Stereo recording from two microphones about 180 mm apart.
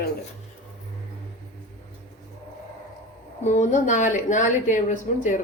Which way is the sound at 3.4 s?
45° left (ahead or behind).